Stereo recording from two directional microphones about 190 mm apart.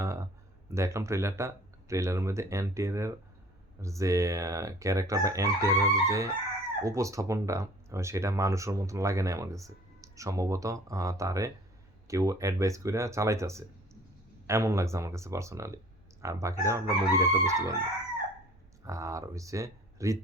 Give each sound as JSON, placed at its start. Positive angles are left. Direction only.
{"t": 0.0, "sound": "a sound", "side_deg": -15}
{"t": 0.7, "sound": "speech", "side_deg": -15}
{"t": 18.9, "sound": "speech", "side_deg": -15}